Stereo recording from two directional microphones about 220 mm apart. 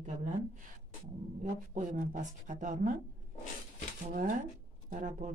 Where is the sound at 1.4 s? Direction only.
35° right (ahead or behind).